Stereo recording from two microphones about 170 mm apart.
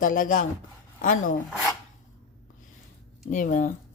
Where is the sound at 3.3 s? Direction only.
50° left (ahead or behind).